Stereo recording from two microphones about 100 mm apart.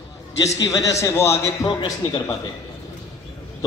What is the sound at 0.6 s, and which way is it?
Speech, 35° left (ahead or behind).